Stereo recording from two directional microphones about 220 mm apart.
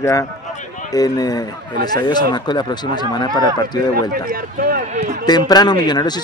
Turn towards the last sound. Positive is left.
turn(degrees=20)  # may be behind; listen again after turning